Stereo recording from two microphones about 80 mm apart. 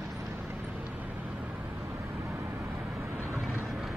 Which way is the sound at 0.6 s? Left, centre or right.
Right.